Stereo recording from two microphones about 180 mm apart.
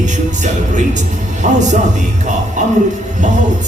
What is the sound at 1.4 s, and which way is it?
Speech, 45° right (ahead or behind).